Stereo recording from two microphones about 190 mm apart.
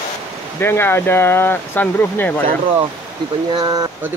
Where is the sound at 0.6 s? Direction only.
10° left (ahead or behind).